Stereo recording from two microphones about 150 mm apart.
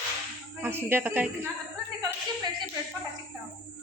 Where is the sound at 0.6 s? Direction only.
15° right (ahead or behind).